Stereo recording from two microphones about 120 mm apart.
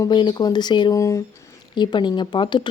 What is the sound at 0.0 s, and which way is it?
Speech, 40° left (ahead or behind).